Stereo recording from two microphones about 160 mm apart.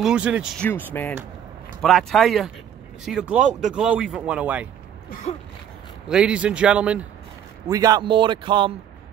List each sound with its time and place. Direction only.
0.0 s speech: 5° right (ahead or behind)
0.6 s speech: 10° left (ahead or behind)
1.8 s speech: centre (ahead or behind)
6.0 s speech: 5° right (ahead or behind)
7.6 s a man's voice: 25° right (ahead or behind)